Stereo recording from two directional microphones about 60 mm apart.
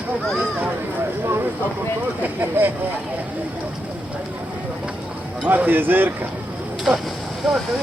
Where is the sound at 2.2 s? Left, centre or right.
Right.